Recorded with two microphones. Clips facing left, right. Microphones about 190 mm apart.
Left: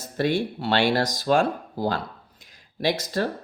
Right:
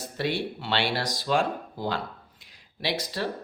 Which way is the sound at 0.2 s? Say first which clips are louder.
Left 5 dB; 45° left (ahead or behind).